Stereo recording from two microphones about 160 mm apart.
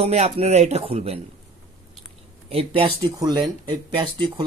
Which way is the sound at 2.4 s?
35° right (ahead or behind).